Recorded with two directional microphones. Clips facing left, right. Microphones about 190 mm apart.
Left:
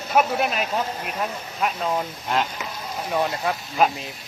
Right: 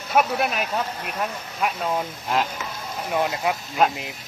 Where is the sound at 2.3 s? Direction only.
Centre (ahead or behind).